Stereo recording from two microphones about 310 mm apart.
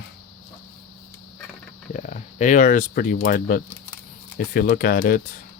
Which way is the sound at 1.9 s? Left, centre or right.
Left.